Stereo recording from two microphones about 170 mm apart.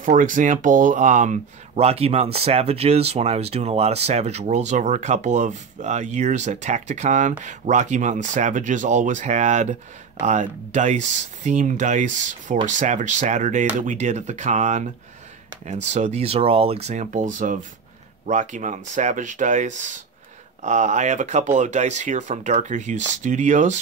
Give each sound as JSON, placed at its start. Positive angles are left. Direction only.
{"t": 0.0, "sound": "speech", "side_deg": -50}